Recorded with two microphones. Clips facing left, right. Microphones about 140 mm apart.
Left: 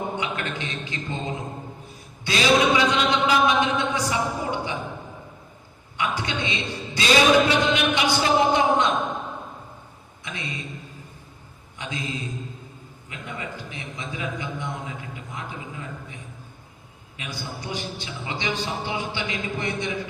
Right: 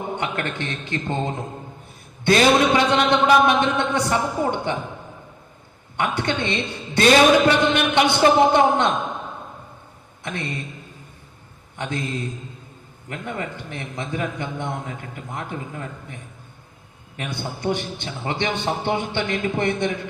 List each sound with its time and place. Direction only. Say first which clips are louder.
0.2 s a man's voice: right 3 dB; 60° right (ahead or behind)
2.2 s a man's voice: right 4 dB; 55° right (ahead or behind)
6.0 s a man's voice: right 4 dB; 60° right (ahead or behind)
10.2 s a man's voice: right 5 dB; 55° right (ahead or behind)
11.8 s a man's voice: right 5 dB; 55° right (ahead or behind)